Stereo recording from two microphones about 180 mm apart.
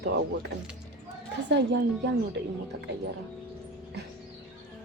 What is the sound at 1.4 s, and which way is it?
Speech, 75° right (ahead or behind).